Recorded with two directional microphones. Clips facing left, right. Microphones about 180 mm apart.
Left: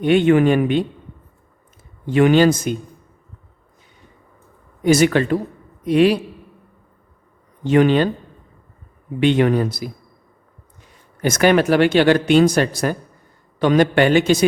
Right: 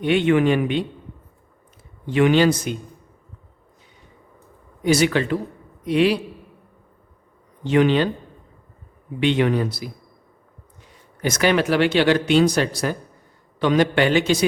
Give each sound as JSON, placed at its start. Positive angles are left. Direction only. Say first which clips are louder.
{"t": 0.0, "sound": "speech", "louder": "left 4 dB", "side_deg": 45}
{"t": 2.0, "sound": "speech", "louder": "left 3 dB", "side_deg": 45}
{"t": 4.8, "sound": "speech", "louder": "left 4 dB", "side_deg": 50}
{"t": 7.6, "sound": "speech", "louder": "left 3 dB", "side_deg": 45}
{"t": 9.2, "sound": "speech", "louder": "left 3 dB", "side_deg": 45}
{"t": 11.2, "sound": "speech", "louder": "left 4 dB", "side_deg": 50}